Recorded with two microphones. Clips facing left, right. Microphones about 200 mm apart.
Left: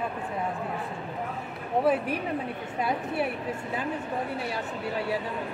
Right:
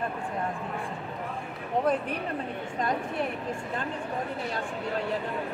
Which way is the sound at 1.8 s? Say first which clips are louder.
Left 3 dB; 5° left (ahead or behind).